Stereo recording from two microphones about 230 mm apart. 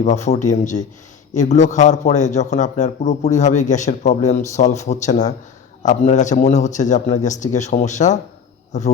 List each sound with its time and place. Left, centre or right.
0.0 s a man's voice: left